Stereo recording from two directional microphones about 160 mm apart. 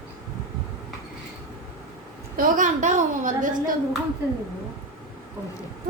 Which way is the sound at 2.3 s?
50° right (ahead or behind).